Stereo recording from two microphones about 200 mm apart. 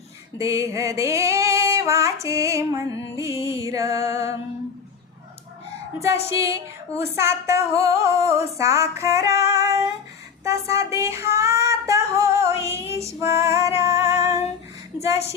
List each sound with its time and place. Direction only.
0.3 s female singing: 15° right (ahead or behind)
6.0 s female singing: 15° right (ahead or behind)